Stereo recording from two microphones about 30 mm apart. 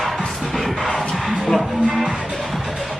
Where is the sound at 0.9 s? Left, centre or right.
Centre.